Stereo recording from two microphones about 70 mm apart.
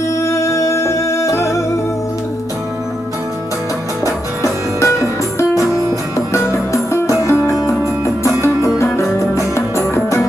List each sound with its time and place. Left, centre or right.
0.2 s music: left
4.0 s music: left